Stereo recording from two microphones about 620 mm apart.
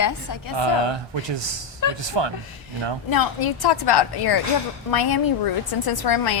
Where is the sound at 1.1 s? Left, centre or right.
Right.